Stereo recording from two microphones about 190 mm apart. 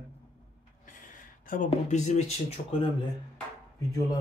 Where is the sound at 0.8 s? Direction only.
45° left (ahead or behind).